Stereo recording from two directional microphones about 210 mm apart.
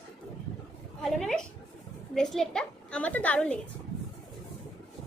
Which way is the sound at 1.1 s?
Centre (ahead or behind).